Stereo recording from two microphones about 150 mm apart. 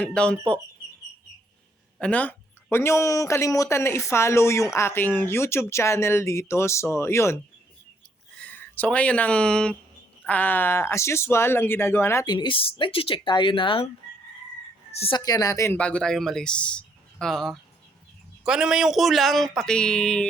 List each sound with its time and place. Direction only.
0.0 s speech: 5° left (ahead or behind)
2.0 s speech: 10° left (ahead or behind)
8.4 s speech: 10° left (ahead or behind)
12.2 s speech: 30° left (ahead or behind)
14.9 s speech: 40° left (ahead or behind)
15.2 s speech: 25° left (ahead or behind); by 20.2 s 5° left (ahead or behind)